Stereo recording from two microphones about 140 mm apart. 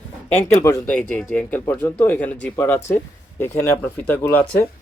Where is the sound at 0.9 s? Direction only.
10° left (ahead or behind).